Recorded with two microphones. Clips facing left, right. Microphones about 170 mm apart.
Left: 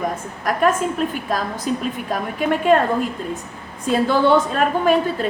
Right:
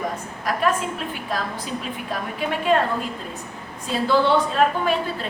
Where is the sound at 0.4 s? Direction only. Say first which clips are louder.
Left 4 dB; 50° left (ahead or behind).